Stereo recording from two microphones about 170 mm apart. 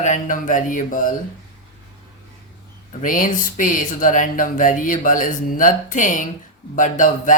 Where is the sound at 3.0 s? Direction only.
50° left (ahead or behind).